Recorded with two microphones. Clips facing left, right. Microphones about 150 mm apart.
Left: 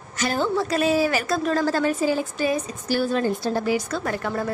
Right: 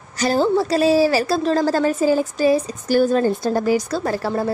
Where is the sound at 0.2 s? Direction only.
35° right (ahead or behind).